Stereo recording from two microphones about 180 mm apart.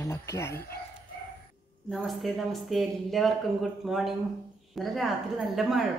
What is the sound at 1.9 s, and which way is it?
A woman's voice, centre (ahead or behind).